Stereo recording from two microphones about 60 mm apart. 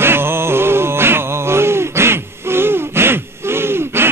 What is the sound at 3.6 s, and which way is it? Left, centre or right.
Gasp, right.